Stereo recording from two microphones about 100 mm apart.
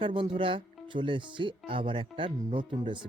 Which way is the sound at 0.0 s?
60° right (ahead or behind).